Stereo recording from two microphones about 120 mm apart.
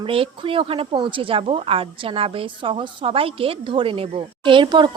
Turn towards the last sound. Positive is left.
turn(degrees=-40)  # may be behind; listen again after turning